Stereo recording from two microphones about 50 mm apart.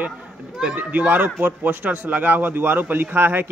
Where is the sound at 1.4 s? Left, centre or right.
Right.